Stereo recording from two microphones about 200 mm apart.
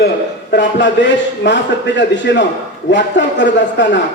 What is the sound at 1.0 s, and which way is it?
A man's voice, 65° left (ahead or behind).